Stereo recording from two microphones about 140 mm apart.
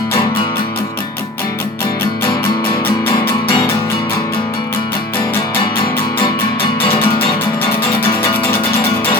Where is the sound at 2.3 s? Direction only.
25° left (ahead or behind).